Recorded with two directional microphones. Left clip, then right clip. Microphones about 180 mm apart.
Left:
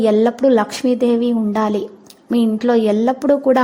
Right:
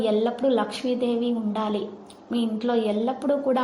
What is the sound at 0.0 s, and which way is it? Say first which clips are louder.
A woman's voice: left 9 dB; 55° left (ahead or behind).